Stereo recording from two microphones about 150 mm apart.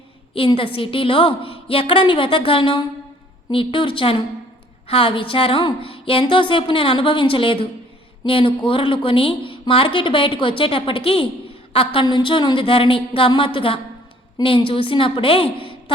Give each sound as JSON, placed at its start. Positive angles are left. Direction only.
{"t": 0.3, "sound": "a woman's voice", "side_deg": 35}